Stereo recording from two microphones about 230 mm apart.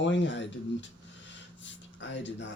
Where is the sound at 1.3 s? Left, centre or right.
Left.